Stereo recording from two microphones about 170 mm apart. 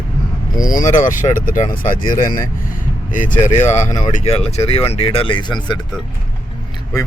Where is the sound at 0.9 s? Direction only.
50° left (ahead or behind); by 5.8 s 25° left (ahead or behind).